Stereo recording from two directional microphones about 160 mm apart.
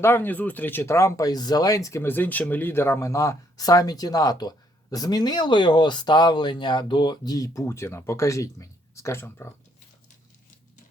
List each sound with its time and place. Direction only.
0.0 s speech: 15° left (ahead or behind)